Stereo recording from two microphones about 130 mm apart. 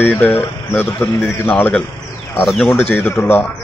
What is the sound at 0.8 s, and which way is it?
Speech, 15° left (ahead or behind).